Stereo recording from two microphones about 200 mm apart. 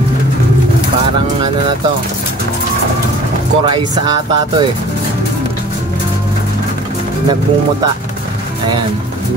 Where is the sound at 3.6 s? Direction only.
25° right (ahead or behind).